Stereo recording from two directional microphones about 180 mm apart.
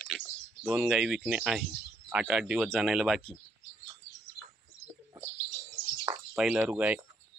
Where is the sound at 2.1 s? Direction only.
5° right (ahead or behind).